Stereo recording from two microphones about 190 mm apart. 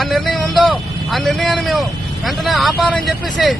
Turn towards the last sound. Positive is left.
turn(degrees=0)  # may be behind; listen again after turning